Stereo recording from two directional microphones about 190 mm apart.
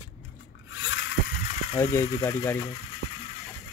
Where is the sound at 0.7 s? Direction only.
75° left (ahead or behind).